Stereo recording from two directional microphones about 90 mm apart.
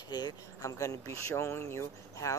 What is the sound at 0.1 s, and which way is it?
Speech, 50° left (ahead or behind).